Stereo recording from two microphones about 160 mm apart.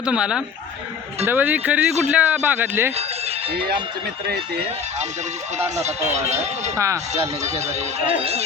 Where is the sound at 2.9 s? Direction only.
40° right (ahead or behind).